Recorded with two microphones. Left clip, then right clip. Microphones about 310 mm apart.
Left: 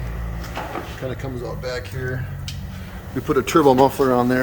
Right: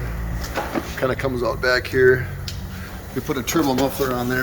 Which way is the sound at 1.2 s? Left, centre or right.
Centre.